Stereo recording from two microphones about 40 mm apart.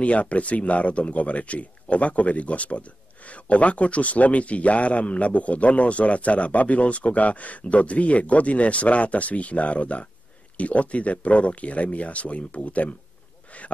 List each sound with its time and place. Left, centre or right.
0.0 s speech: left